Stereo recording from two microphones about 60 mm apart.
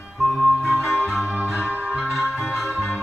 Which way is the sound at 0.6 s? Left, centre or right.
Centre.